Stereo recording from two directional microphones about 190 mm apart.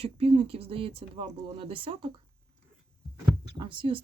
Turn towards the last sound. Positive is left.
turn(degrees=-25)  # may be behind; listen again after turning